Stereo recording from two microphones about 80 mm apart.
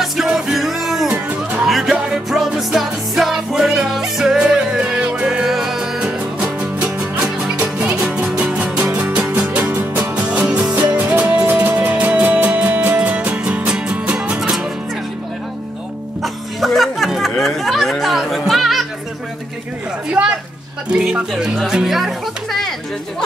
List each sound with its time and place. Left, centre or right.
0.0 s music: centre
8.7 s music: right
9.4 s music: centre
16.2 s music: centre
20.1 s a sound: centre
20.9 s speech: centre